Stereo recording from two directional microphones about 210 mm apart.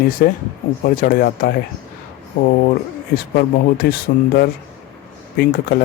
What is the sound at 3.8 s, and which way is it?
Speech, 50° left (ahead or behind).